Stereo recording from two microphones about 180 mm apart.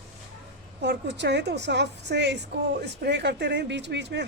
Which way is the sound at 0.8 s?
75° right (ahead or behind).